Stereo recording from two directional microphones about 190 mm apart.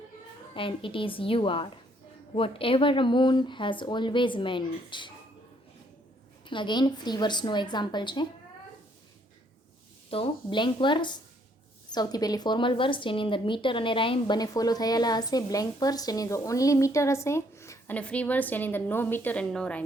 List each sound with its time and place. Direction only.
0.5 s speech: 25° left (ahead or behind)
6.5 s speech: 25° left (ahead or behind)
10.1 s speech: 25° left (ahead or behind); by 19.8 s 5° left (ahead or behind)